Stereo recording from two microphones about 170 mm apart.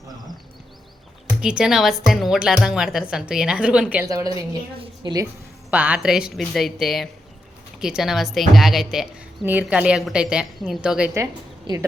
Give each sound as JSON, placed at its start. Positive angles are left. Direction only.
{"t": 1.4, "sound": "speech", "side_deg": -5}
{"t": 4.0, "sound": "a woman's voice", "side_deg": -20}
{"t": 5.7, "sound": "a woman's voice", "side_deg": -10}
{"t": 11.1, "sound": "a woman's voice", "side_deg": -20}